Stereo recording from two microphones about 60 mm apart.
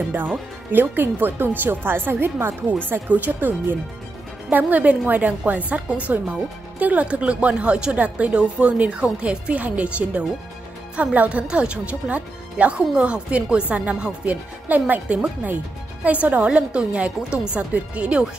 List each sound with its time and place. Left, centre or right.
0.1 s speech: right